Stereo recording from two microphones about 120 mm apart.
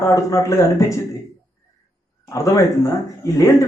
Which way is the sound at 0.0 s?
25° left (ahead or behind).